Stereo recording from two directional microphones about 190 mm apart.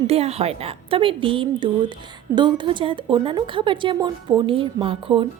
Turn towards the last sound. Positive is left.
turn(degrees=-30)  # may be behind; listen again after turning